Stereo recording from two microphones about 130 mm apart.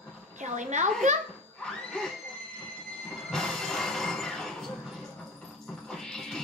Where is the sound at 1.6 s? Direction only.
5° left (ahead or behind).